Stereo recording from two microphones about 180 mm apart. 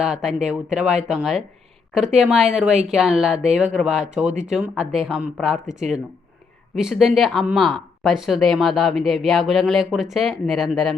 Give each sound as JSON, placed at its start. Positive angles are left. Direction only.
{"t": 0.0, "sound": "speech", "side_deg": 0}
{"t": 6.7, "sound": "speech", "side_deg": 0}